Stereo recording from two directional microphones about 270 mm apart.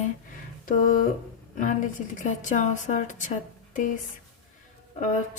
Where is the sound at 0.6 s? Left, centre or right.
Left.